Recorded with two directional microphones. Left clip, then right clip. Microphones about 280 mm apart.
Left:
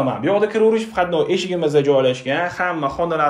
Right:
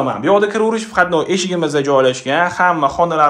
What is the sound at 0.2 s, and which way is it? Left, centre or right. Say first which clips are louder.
Speech: right 3 dB; centre.